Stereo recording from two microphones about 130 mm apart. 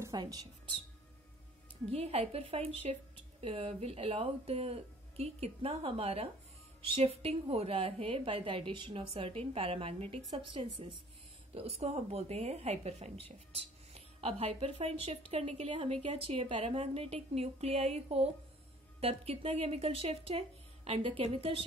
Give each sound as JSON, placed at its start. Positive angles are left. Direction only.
{"t": 0.0, "sound": "speech", "side_deg": -25}
{"t": 1.9, "sound": "speech", "side_deg": -50}
{"t": 11.5, "sound": "speech", "side_deg": -50}